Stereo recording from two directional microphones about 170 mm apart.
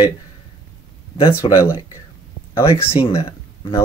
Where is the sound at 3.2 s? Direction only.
35° left (ahead or behind).